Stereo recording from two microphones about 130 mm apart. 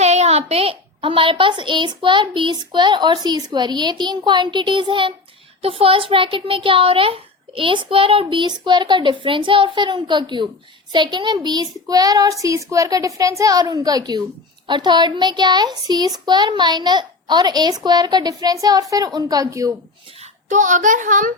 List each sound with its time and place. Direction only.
0.0 s a woman's voice: 55° right (ahead or behind); by 11.3 s 35° right (ahead or behind)
11.3 s child singing: 30° right (ahead or behind)
14.7 s a woman's voice: 35° right (ahead or behind)
20.1 s a child's voice: 65° right (ahead or behind); by 21.3 s 85° right